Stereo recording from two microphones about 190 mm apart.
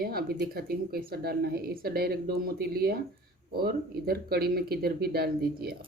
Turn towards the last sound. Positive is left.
turn(degrees=-55)  # may be behind; listen again after turning